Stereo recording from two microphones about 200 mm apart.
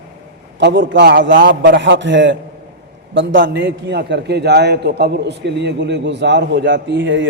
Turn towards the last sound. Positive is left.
turn(degrees=-65)  # may be behind; listen again after turning